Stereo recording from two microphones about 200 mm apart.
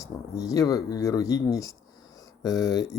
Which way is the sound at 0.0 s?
15° left (ahead or behind).